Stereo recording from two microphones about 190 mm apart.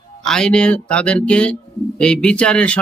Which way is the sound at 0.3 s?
5° left (ahead or behind).